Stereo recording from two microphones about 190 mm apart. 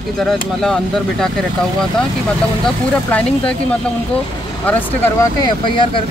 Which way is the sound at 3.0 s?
5° left (ahead or behind).